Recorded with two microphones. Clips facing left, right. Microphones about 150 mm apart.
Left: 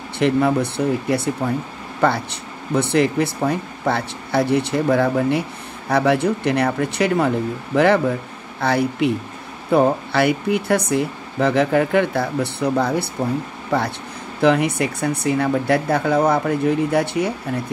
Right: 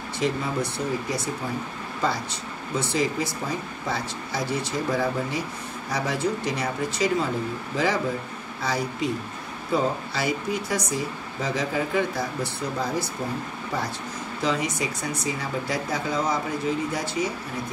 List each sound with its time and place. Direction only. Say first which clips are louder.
0.2 s speech: left 9 dB; 60° left (ahead or behind)